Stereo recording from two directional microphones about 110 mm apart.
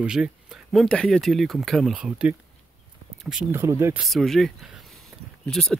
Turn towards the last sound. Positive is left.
turn(degrees=5)  # may be behind; listen again after turning